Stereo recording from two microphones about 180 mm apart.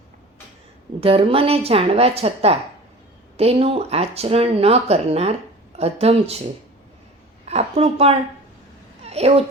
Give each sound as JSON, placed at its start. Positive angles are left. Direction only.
{"t": 1.0, "sound": "speech", "side_deg": -30}
{"t": 7.4, "sound": "a woman's voice", "side_deg": -35}